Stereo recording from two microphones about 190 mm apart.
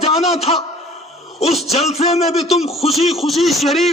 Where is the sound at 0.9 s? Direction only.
Centre (ahead or behind).